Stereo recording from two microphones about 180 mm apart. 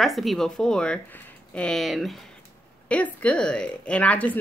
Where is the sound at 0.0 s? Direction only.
Centre (ahead or behind).